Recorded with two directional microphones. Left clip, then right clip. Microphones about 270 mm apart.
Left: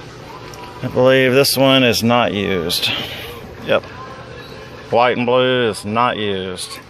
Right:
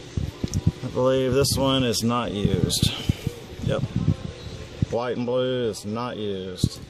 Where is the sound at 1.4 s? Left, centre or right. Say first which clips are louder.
Left 10 dB; centre.